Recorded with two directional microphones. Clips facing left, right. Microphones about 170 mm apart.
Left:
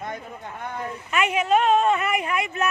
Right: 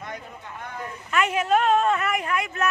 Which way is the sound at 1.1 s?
Centre (ahead or behind).